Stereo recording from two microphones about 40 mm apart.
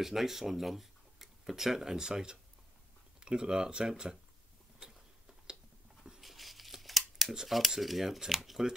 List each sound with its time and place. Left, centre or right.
0.0 s speech: centre
2.0 s speech: centre
6.2 s tearing: centre
7.3 s speech: centre